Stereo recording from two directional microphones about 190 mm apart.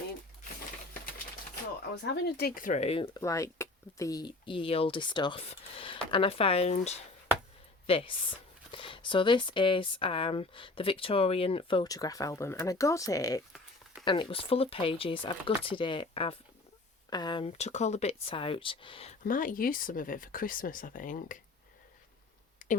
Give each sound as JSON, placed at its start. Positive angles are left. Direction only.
{"t": 2.0, "sound": "speech", "side_deg": 65}
{"t": 3.2, "sound": "speech", "side_deg": 15}
{"t": 19.2, "sound": "speech", "side_deg": 45}